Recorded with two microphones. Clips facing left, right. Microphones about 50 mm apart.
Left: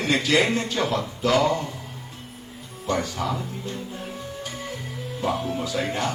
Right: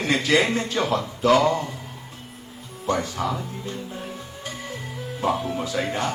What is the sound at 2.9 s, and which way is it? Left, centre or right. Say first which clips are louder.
Speech: right 1 dB; right.